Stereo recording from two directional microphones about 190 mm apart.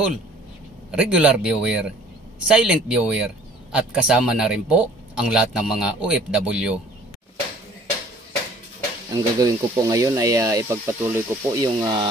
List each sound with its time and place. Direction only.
0.9 s speech: 5° right (ahead or behind)
9.1 s speech: 20° right (ahead or behind)